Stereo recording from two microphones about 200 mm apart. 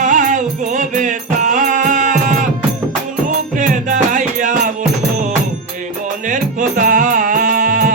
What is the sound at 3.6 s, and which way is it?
Music, 40° right (ahead or behind).